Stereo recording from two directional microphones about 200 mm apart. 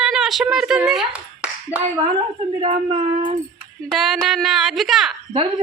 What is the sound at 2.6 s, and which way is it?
Speech, 30° right (ahead or behind).